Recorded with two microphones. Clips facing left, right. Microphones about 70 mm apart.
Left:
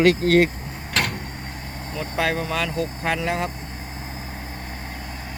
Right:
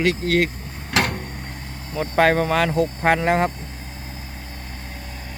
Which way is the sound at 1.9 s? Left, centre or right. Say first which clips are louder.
Right 7 dB; right.